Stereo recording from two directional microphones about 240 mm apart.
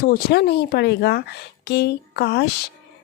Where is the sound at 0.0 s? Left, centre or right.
Left.